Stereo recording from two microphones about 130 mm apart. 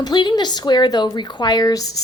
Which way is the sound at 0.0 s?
35° left (ahead or behind).